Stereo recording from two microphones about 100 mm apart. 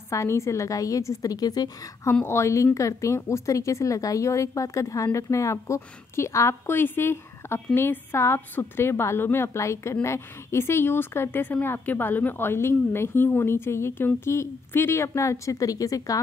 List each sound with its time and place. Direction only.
0.1 s a woman's voice: 30° left (ahead or behind)
2.2 s speech: 30° left (ahead or behind)